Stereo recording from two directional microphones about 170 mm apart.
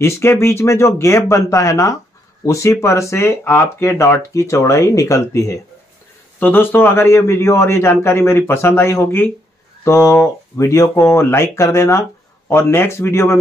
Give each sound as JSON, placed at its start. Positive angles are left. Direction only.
{"t": 0.0, "sound": "speech", "side_deg": 15}